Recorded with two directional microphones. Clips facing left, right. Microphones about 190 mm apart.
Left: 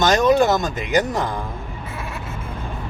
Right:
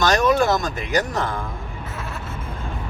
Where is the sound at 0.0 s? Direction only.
20° left (ahead or behind).